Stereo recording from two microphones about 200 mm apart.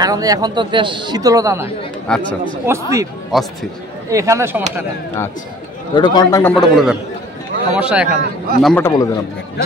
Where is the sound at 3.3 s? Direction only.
Centre (ahead or behind).